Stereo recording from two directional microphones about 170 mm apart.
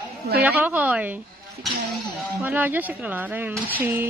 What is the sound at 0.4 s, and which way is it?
Speech, 10° right (ahead or behind).